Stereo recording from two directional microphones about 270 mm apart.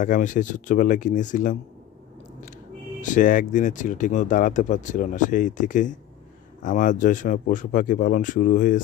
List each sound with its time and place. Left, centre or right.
0.0 s speech: left
3.0 s speech: left